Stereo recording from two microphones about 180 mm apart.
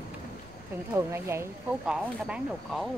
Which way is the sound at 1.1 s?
15° right (ahead or behind).